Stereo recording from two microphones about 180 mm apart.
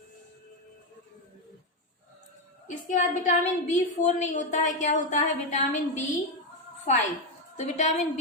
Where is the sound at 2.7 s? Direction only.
45° left (ahead or behind).